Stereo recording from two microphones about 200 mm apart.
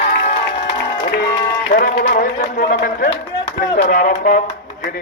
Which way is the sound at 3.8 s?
40° left (ahead or behind).